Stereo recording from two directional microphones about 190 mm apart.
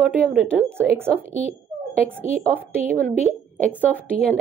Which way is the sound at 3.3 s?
10° left (ahead or behind).